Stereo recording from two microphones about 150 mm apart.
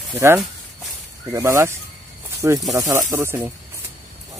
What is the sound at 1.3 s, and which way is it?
Speech, 20° right (ahead or behind).